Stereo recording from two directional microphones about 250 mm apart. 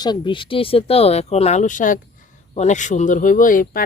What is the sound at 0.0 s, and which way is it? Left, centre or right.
Speech, centre.